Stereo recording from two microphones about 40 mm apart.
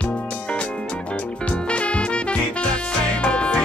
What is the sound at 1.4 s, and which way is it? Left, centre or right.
Music, left.